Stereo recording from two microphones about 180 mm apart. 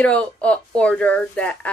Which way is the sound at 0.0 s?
5° left (ahead or behind).